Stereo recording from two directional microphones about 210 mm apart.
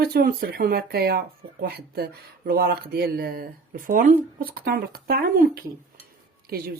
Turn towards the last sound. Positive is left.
turn(degrees=-45)  # may be behind; listen again after turning